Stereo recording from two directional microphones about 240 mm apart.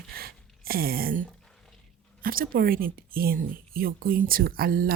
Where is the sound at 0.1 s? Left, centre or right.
Right.